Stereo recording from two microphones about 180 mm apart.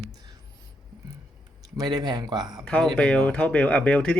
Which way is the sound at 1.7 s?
20° right (ahead or behind).